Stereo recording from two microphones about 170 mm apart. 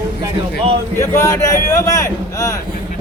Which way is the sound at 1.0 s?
15° left (ahead or behind).